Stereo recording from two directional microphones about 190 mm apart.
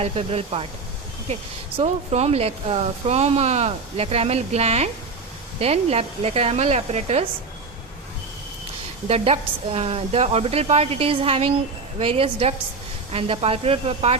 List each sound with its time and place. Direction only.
0.0 s speech: 35° right (ahead or behind)
9.0 s speech: 35° right (ahead or behind)